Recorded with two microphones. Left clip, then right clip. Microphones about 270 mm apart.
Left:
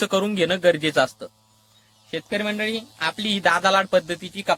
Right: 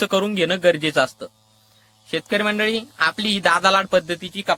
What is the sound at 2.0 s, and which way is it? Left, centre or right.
Speech, right.